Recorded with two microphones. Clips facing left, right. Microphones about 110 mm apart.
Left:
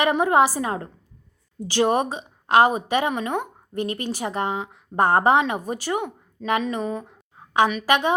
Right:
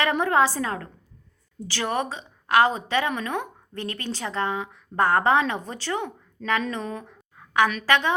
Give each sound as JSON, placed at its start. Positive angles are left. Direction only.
{"t": 0.0, "sound": "a woman's voice", "side_deg": 15}